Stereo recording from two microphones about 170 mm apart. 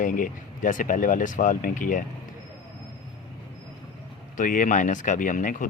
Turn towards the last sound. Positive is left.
turn(degrees=50)  # may be behind; listen again after turning